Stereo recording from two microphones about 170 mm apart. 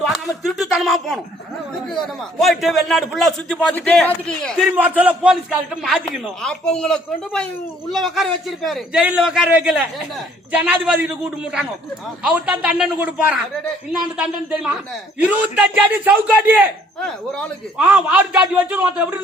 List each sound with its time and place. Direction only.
0.0 s a sound: centre (ahead or behind)
1.9 s a man's voice: centre (ahead or behind)
4.7 s a man's voice: 10° right (ahead or behind)
12.2 s a man's voice: 5° right (ahead or behind)
17.0 s a man's voice: 5° left (ahead or behind)
17.7 s a man's voice: 5° right (ahead or behind)